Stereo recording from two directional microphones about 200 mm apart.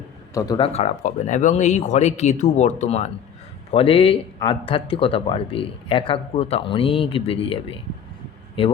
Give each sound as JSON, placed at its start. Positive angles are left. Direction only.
{"t": 0.3, "sound": "speech", "side_deg": 20}
{"t": 0.7, "sound": "speech", "side_deg": 35}